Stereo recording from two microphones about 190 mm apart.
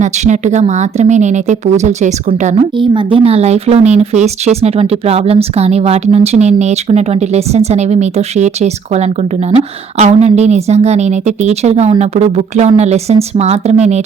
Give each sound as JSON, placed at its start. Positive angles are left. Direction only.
{"t": 0.0, "sound": "speech", "side_deg": -40}
{"t": 2.7, "sound": "speech", "side_deg": -25}